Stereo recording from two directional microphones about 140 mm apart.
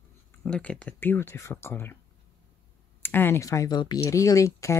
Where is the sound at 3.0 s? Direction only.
15° left (ahead or behind).